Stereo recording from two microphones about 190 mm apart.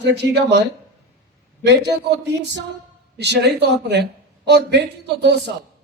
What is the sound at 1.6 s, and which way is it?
Speech, 65° right (ahead or behind).